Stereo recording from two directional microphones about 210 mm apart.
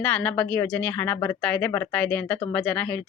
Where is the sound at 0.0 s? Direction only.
5° left (ahead or behind).